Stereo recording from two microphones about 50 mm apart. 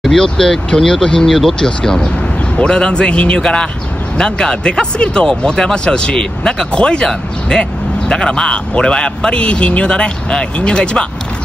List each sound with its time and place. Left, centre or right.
0.0 s speech: centre
1.8 s speech: centre